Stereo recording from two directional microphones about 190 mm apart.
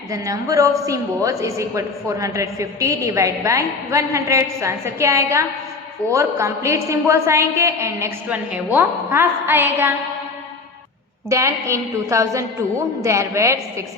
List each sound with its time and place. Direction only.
0.1 s a woman's voice: 15° right (ahead or behind)
11.3 s a woman's voice: 15° right (ahead or behind)